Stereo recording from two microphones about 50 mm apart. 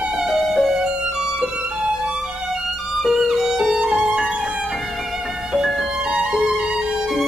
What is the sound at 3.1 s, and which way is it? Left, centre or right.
Music, centre.